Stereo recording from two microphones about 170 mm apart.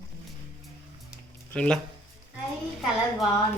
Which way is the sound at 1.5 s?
5° left (ahead or behind).